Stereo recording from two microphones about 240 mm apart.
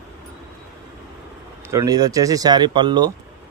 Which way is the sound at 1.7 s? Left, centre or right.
Centre.